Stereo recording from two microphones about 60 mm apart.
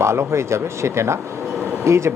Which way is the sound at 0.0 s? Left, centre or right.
Right.